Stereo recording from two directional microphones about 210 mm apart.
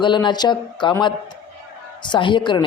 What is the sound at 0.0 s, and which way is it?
Speech, 20° left (ahead or behind).